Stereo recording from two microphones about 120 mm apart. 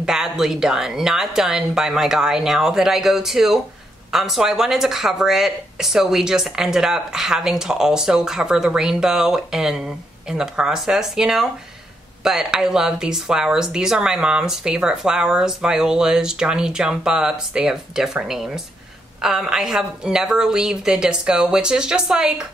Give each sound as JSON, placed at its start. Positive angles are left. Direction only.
{"t": 0.0, "sound": "speech", "side_deg": -5}